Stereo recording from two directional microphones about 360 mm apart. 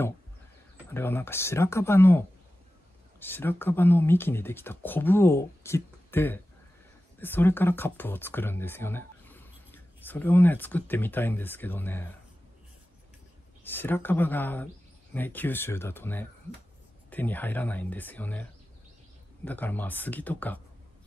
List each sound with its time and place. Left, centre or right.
0.9 s speech: centre
13.7 s speech: centre